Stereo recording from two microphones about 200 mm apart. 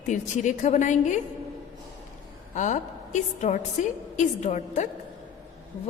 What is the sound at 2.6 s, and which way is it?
A woman's voice, 35° left (ahead or behind).